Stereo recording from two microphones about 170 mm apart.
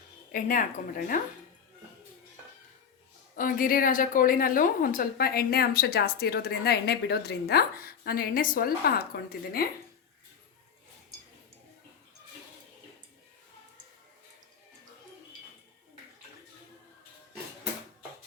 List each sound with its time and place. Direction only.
0.3 s a woman's voice: 55° left (ahead or behind)
3.3 s a woman's voice: 55° left (ahead or behind)